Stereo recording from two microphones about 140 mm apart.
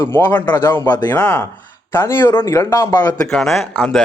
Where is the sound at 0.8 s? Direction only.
30° left (ahead or behind).